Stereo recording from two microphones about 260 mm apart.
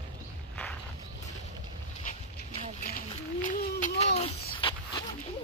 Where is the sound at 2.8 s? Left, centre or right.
Left.